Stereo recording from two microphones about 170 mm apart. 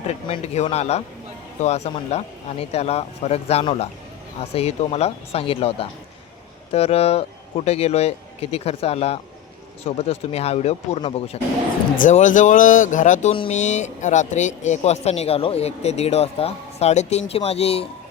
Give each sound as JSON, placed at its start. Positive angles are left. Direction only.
{"t": 0.1, "sound": "speech", "side_deg": 40}
{"t": 11.9, "sound": "speech", "side_deg": 50}